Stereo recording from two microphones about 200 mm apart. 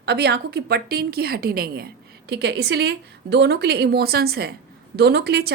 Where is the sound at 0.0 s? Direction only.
55° right (ahead or behind).